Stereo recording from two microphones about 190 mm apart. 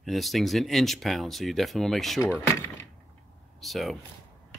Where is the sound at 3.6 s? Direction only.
Centre (ahead or behind).